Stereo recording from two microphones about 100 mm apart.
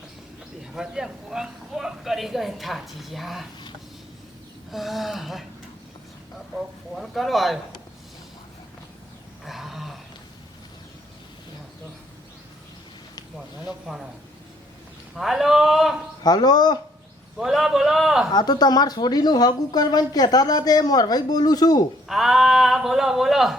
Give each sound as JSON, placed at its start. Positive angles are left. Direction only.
{"t": 0.7, "sound": "speech", "side_deg": -5}
{"t": 4.7, "sound": "speech", "side_deg": 0}
{"t": 6.9, "sound": "speech", "side_deg": 0}
{"t": 9.4, "sound": "a sound", "side_deg": 0}
{"t": 13.7, "sound": "speech", "side_deg": -5}
{"t": 15.1, "sound": "speech", "side_deg": 0}
{"t": 16.2, "sound": "speech", "side_deg": 45}
{"t": 17.3, "sound": "speech", "side_deg": -5}
{"t": 18.3, "sound": "speech", "side_deg": 45}
{"t": 22.0, "sound": "speech", "side_deg": 0}